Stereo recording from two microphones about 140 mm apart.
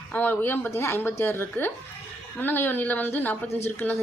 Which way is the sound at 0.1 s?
15° left (ahead or behind).